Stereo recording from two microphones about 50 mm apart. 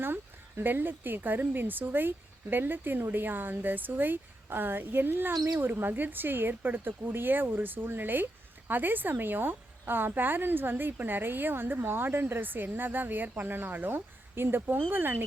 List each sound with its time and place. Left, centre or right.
0.0 s speech: right